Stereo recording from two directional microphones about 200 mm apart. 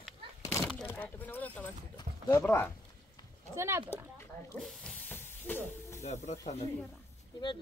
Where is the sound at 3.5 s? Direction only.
10° right (ahead or behind).